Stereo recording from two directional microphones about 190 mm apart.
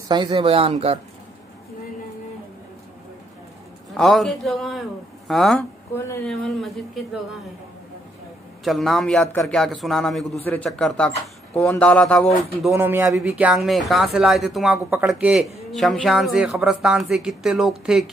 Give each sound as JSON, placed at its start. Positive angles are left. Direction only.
{"t": 0.1, "sound": "speech", "side_deg": -25}
{"t": 3.9, "sound": "speech", "side_deg": 0}
{"t": 8.6, "sound": "speech", "side_deg": 0}
{"t": 12.7, "sound": "speech", "side_deg": -10}